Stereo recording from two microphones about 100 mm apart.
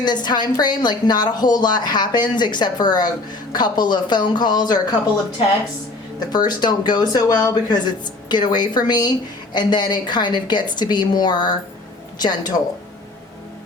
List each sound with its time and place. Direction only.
0.0 s a woman's voice: 45° left (ahead or behind)
6.1 s a woman's voice: 45° left (ahead or behind)